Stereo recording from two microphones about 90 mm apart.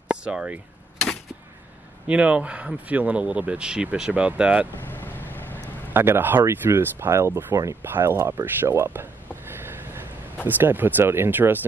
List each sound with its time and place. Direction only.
0.1 s speech: 10° right (ahead or behind)
2.0 s speech: 15° right (ahead or behind)
4.8 s vehicle: 20° left (ahead or behind)
5.9 s speech: 25° right (ahead or behind)
10.4 s speech: 20° right (ahead or behind)